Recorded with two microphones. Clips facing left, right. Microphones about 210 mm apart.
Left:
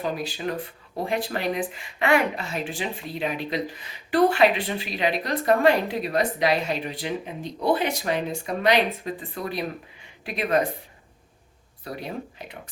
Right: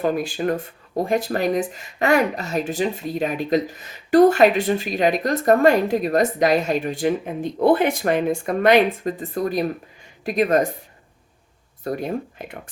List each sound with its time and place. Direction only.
0.0 s speech: 50° right (ahead or behind)
11.8 s speech: 45° right (ahead or behind)